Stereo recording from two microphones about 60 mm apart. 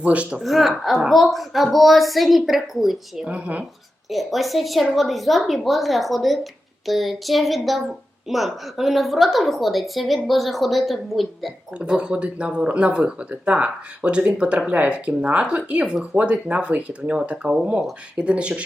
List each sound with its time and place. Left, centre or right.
0.0 s speech: right
0.4 s a woman's voice: centre
3.2 s speech: right
4.1 s a woman's voice: centre
11.8 s speech: centre